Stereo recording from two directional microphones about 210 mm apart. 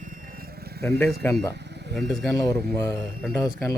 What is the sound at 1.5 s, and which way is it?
Sheep, 55° right (ahead or behind).